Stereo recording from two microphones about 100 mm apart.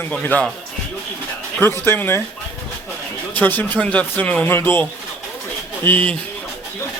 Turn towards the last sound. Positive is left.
turn(degrees=20)  # may be behind; listen again after turning